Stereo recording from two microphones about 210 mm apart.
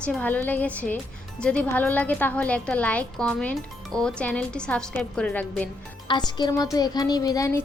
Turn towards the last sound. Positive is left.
turn(degrees=15)  # may be behind; listen again after turning